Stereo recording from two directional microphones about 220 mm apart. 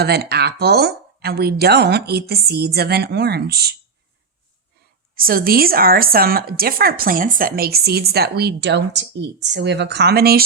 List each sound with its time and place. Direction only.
0.0 s speech: 45° right (ahead or behind)
5.1 s speech: 40° right (ahead or behind)